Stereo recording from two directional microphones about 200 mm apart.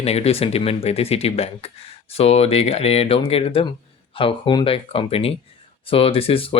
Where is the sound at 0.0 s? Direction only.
30° left (ahead or behind).